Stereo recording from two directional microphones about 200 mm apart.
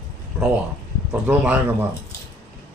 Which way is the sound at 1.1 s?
5° right (ahead or behind).